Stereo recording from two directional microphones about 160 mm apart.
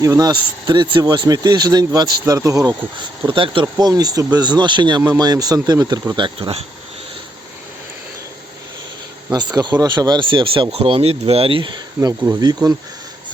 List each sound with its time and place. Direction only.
0.0 s speech: 25° right (ahead or behind)
3.2 s speech: 30° right (ahead or behind)
9.6 s speech: 25° right (ahead or behind)
11.9 s speech: 20° right (ahead or behind)